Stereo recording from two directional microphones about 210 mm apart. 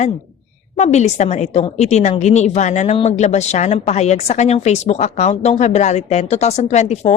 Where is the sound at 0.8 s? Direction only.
35° left (ahead or behind).